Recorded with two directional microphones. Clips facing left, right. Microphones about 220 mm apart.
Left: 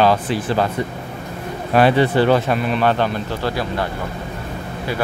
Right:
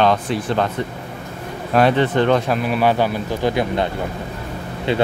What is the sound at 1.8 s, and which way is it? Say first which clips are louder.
A man's voice: left 1 dB; 5° left (ahead or behind).